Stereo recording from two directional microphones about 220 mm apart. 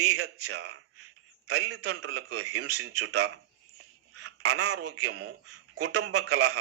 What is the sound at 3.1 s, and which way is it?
Speech, 90° right.